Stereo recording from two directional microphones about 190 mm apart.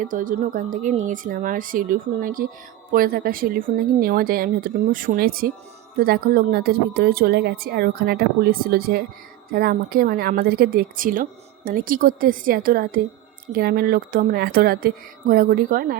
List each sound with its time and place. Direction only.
0.0 s speech: 45° right (ahead or behind)